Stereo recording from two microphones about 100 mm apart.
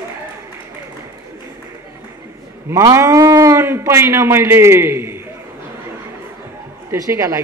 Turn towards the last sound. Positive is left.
turn(degrees=-30)  # may be behind; listen again after turning